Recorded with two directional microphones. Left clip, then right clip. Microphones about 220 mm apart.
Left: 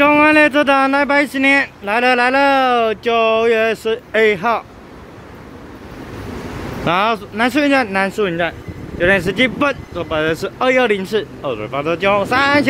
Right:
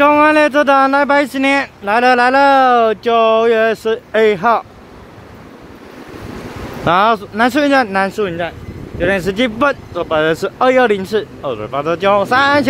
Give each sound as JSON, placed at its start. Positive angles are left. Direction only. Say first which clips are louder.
{"t": 0.0, "sound": "speech", "louder": "right 1 dB", "side_deg": -10}
{"t": 6.8, "sound": "speech", "louder": "right 4 dB", "side_deg": -20}
{"t": 9.2, "sound": "speech", "louder": "right 1 dB", "side_deg": -15}